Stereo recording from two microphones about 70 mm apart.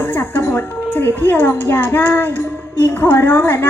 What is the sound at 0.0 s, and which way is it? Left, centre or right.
A woman's voice, left.